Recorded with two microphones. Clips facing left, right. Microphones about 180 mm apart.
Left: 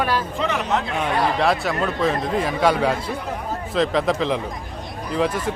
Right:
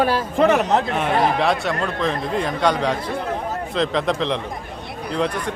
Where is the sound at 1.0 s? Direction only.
Centre (ahead or behind).